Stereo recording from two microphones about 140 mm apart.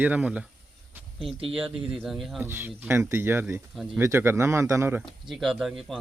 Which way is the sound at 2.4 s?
15° right (ahead or behind).